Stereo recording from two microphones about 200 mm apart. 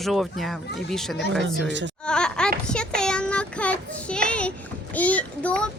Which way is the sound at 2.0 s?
5° left (ahead or behind).